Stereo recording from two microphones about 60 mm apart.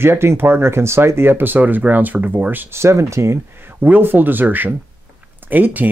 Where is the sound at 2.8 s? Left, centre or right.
Right.